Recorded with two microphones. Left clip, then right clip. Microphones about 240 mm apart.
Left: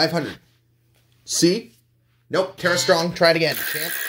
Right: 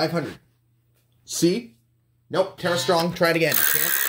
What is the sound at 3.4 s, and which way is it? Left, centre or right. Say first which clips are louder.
Speech: even; right.